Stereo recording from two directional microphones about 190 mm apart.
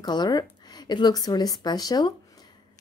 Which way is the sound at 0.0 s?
20° left (ahead or behind).